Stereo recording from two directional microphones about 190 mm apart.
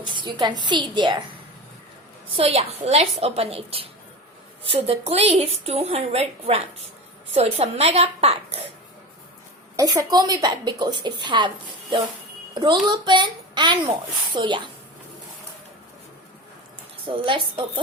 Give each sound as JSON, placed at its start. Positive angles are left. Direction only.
{"t": 0.0, "sound": "a sound", "side_deg": -25}
{"t": 0.3, "sound": "a woman's voice", "side_deg": -25}
{"t": 2.3, "sound": "a woman's voice", "side_deg": -30}
{"t": 9.7, "sound": "a woman's voice", "side_deg": -15}
{"t": 17.1, "sound": "a woman's voice", "side_deg": -25}